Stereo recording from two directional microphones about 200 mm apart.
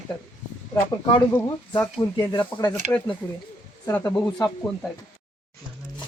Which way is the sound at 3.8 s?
15° left (ahead or behind).